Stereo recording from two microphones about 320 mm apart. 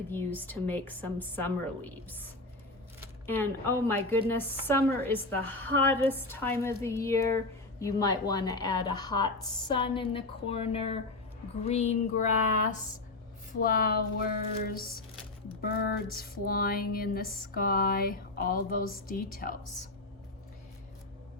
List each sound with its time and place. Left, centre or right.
0.1 s a woman's voice: centre
13.6 s speech: left